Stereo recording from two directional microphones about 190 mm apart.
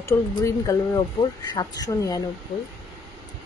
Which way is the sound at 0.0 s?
15° left (ahead or behind).